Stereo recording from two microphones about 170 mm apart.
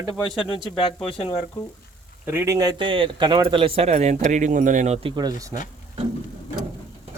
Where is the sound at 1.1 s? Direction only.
35° left (ahead or behind).